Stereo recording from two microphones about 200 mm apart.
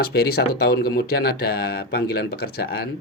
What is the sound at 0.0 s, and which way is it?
Speech, 50° left (ahead or behind).